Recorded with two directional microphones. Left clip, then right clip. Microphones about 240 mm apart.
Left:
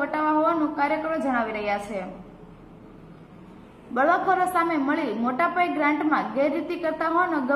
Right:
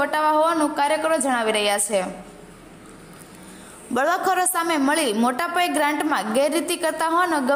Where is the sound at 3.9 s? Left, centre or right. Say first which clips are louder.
Right 1 dB; right.